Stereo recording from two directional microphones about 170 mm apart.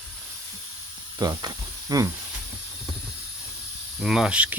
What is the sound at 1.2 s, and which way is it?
Speech, 25° right (ahead or behind).